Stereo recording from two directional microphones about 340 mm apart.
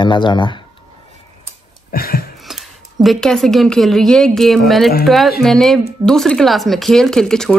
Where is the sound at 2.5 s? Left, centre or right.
Centre.